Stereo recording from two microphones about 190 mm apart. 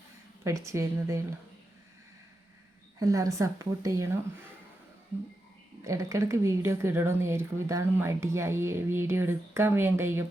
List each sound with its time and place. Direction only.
0.4 s a woman's voice: 15° right (ahead or behind)
3.0 s a woman's voice: 15° right (ahead or behind)
5.8 s a woman's voice: 15° right (ahead or behind)